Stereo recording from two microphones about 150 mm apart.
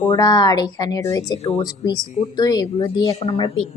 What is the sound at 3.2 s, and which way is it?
Speech, 40° left (ahead or behind).